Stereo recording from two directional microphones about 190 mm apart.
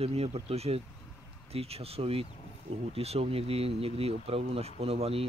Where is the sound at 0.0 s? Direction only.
30° right (ahead or behind).